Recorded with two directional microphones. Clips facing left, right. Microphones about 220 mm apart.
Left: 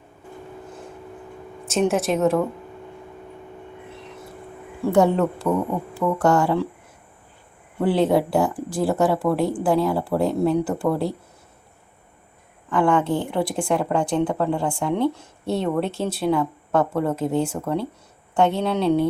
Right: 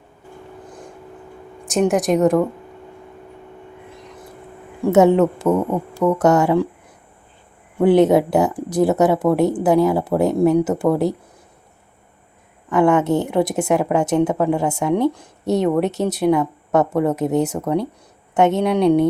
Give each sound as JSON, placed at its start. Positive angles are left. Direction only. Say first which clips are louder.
{"t": 1.6, "sound": "a woman's voice", "louder": "right 3 dB", "side_deg": -15}
{"t": 5.1, "sound": "a woman's voice", "louder": "right 5 dB", "side_deg": -20}
{"t": 7.8, "sound": "a woman's voice", "louder": "right 6 dB", "side_deg": -20}
{"t": 12.7, "sound": "a woman's voice", "louder": "right 4 dB", "side_deg": -20}